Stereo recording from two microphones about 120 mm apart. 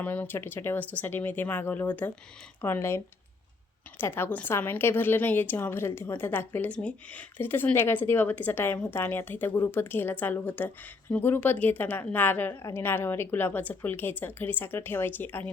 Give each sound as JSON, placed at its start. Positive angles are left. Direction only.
{"t": 0.0, "sound": "a woman's voice", "side_deg": 15}
{"t": 4.0, "sound": "a woman's voice", "side_deg": 20}